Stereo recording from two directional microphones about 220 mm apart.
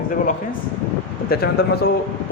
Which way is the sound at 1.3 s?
45° left (ahead or behind).